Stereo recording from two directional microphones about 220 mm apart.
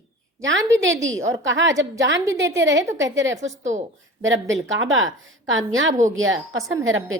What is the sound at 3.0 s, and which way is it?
A woman's voice, 60° right (ahead or behind).